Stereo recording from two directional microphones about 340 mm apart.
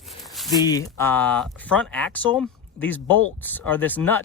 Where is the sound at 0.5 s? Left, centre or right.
Centre.